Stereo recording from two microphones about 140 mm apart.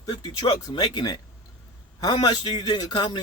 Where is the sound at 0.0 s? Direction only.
30° left (ahead or behind).